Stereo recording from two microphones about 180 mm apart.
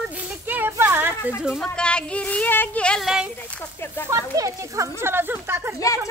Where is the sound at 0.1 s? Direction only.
10° right (ahead or behind).